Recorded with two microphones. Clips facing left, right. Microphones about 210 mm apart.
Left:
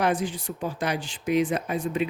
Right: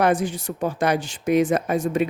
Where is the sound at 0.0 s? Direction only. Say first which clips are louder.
Right 5 dB; 50° right (ahead or behind).